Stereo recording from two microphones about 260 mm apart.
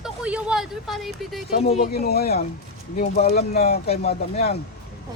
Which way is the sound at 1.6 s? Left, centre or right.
Left.